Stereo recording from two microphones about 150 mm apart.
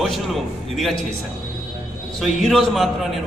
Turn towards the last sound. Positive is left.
turn(degrees=0)  # may be behind; listen again after turning